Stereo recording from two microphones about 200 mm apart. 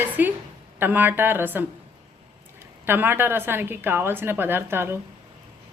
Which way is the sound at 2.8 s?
10° right (ahead or behind).